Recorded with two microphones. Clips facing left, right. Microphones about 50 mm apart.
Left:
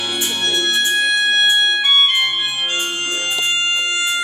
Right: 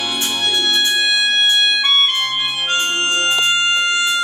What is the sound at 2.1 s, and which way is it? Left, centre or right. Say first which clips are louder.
Organ: left 1 dB; centre.